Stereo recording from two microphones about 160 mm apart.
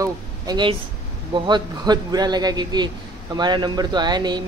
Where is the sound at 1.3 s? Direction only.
25° right (ahead or behind).